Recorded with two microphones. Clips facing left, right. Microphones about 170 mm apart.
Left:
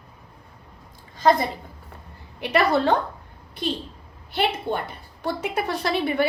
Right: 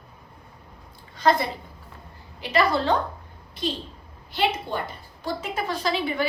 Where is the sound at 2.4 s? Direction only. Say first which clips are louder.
Left 2 dB; 60° left (ahead or behind).